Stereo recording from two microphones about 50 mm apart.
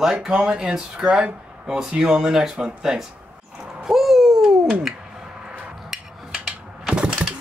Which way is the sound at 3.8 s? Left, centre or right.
Centre.